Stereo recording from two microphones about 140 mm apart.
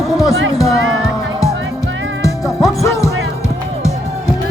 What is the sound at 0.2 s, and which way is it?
Speech, 25° left (ahead or behind).